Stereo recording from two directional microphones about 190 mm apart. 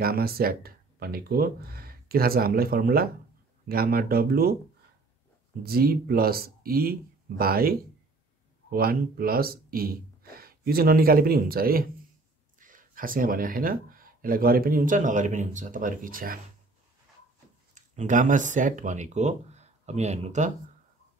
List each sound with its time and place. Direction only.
0.0 s speech: 50° right (ahead or behind)
5.6 s speech: 50° right (ahead or behind)
8.7 s speech: 50° right (ahead or behind)
17.7 s speech: 40° right (ahead or behind)